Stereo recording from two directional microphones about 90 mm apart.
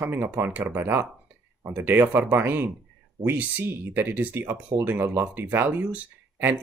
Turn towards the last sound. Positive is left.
turn(degrees=-20)  # may be behind; listen again after turning